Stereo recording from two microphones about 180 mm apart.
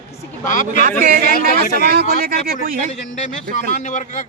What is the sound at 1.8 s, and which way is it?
Speech, 60° right (ahead or behind).